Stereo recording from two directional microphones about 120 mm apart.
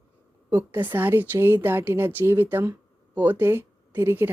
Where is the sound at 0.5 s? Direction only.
15° right (ahead or behind).